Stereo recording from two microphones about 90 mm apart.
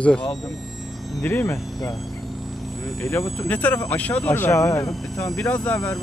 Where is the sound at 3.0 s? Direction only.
30° left (ahead or behind).